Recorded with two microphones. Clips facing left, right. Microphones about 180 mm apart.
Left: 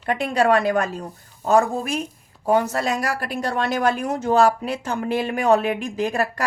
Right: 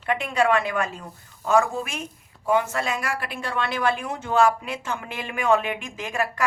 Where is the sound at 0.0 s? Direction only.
40° left (ahead or behind).